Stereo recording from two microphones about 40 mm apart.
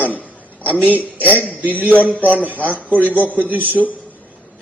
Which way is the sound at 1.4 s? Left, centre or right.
Right.